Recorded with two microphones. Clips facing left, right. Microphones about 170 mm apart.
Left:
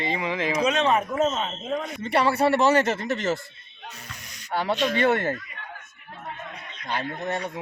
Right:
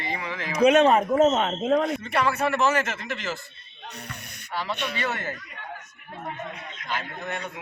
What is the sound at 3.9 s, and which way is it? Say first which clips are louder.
Music: right 5 dB; 65° right (ahead or behind).